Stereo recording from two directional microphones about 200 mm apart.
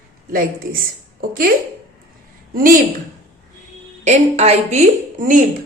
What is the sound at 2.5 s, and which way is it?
Speech, 45° right (ahead or behind).